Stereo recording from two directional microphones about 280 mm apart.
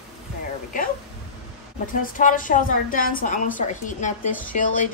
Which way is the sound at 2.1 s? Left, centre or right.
Left.